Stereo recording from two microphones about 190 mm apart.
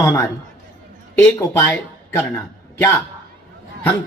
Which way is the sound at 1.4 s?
15° left (ahead or behind).